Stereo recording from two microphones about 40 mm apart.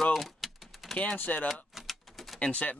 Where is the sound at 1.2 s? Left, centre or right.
Left.